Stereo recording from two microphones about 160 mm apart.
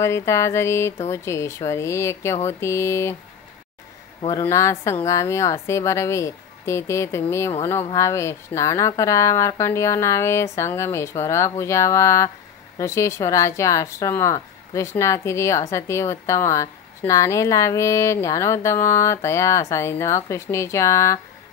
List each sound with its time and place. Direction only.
0.0 s a woman's voice: 15° left (ahead or behind)
4.2 s speech: 30° left (ahead or behind)
4.5 s a woman's voice: 20° left (ahead or behind)